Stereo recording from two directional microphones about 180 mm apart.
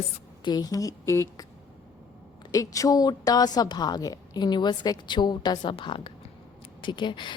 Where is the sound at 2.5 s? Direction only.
20° left (ahead or behind).